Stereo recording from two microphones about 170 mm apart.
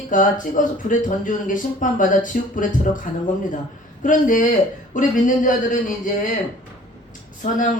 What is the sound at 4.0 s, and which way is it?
Speech, 50° left (ahead or behind).